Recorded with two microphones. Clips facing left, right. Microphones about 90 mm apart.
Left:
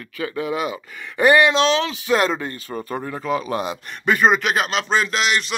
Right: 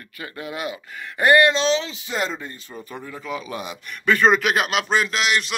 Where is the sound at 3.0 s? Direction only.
45° left (ahead or behind).